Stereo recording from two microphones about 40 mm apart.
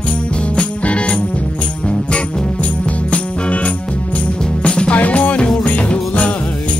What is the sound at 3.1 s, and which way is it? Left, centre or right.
Music, left.